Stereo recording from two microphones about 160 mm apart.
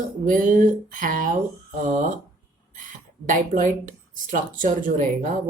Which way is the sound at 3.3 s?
55° right (ahead or behind).